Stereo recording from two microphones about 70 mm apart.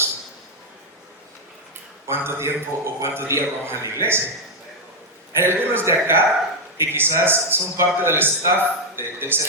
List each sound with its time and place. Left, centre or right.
2.0 s a man's voice: right
5.3 s a man's voice: right